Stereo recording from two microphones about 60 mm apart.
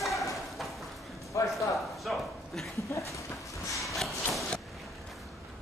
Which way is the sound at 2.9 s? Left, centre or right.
Left.